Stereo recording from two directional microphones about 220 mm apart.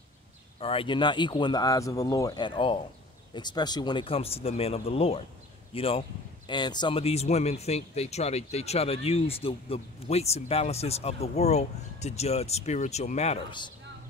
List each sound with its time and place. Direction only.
0.6 s a man's voice: 25° left (ahead or behind)